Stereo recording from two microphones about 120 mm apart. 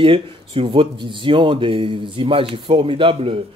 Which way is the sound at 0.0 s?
50° right (ahead or behind).